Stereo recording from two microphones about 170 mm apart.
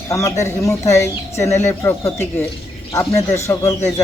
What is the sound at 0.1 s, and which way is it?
Speech, 20° left (ahead or behind).